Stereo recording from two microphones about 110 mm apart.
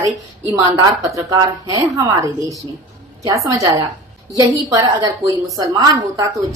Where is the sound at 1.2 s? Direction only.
35° right (ahead or behind).